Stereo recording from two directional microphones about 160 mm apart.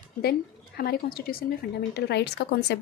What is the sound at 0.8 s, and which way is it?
Speech, 70° left (ahead or behind).